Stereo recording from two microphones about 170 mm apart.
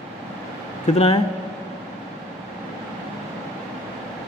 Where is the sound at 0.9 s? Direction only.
35° left (ahead or behind).